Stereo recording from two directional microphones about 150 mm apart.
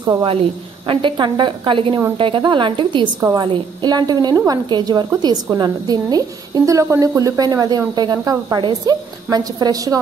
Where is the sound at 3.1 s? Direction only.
20° right (ahead or behind).